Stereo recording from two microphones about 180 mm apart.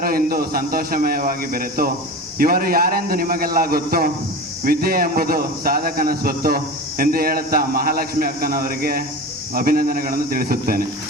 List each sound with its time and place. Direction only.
0.0 s speech: 55° right (ahead or behind)